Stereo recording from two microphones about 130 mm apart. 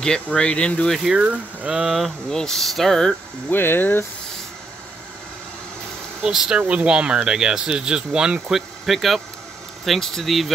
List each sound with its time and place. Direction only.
0.0 s speech: 5° left (ahead or behind)
3.4 s speech: 15° left (ahead or behind)
6.2 s speech: 5° right (ahead or behind)